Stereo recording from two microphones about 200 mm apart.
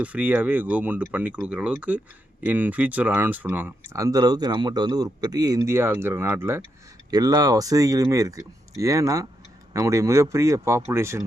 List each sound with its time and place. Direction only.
0.0 s speech: 10° right (ahead or behind)